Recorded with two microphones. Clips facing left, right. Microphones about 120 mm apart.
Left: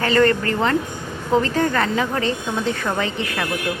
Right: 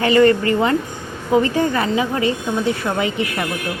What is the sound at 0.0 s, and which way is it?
Speech, 15° right (ahead or behind).